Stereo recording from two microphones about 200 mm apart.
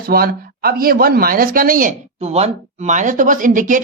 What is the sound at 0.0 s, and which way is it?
Speech, 50° right (ahead or behind).